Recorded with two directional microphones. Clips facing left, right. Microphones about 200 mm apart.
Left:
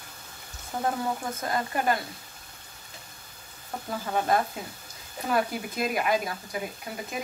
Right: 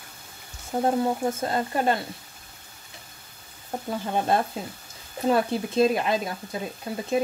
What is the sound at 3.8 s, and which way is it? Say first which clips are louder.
Speech: right 2 dB; 30° right (ahead or behind).